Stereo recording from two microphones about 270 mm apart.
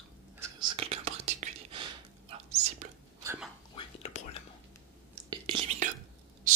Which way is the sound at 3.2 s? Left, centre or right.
Centre.